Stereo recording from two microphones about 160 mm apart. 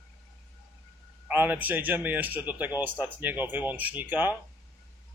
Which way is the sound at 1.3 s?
10° right (ahead or behind).